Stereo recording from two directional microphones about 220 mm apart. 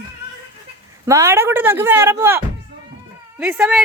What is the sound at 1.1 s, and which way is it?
Speech, 10° right (ahead or behind).